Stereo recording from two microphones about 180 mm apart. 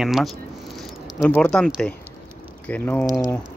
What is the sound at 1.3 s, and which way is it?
Speech, 5° left (ahead or behind).